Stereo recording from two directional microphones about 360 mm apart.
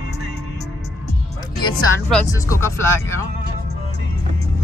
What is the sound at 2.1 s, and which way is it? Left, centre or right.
Speech, centre.